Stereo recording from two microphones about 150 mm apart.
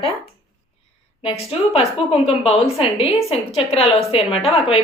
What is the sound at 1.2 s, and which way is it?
A woman's voice, 40° left (ahead or behind).